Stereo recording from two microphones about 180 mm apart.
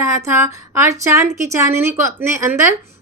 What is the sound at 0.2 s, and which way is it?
A woman's voice, 15° right (ahead or behind).